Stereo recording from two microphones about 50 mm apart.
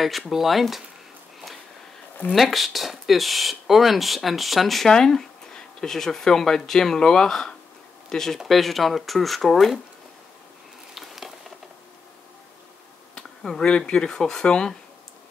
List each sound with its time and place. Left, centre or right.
0.3 s speech: centre
2.3 s speech: centre
11.0 s a sound: centre
13.1 s speech: centre